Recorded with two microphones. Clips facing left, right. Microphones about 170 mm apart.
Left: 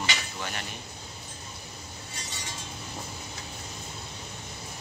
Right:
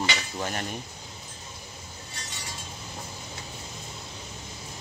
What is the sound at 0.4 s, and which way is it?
Cutlery, 40° right (ahead or behind).